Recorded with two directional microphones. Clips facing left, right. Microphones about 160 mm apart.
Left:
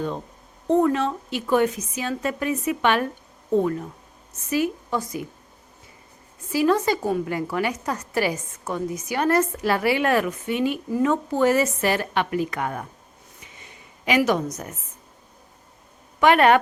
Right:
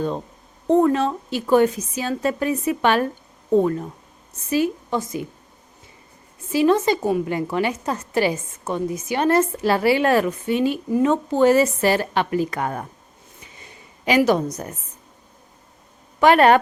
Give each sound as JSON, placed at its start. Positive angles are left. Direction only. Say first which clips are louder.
{"t": 0.7, "sound": "a woman's voice", "louder": "right 3 dB", "side_deg": -35}
{"t": 6.5, "sound": "a woman's voice", "louder": "right 3 dB", "side_deg": -25}
{"t": 13.4, "sound": "a sound", "louder": "right 2 dB", "side_deg": -35}
{"t": 16.2, "sound": "a woman's voice", "louder": "right 2 dB", "side_deg": -35}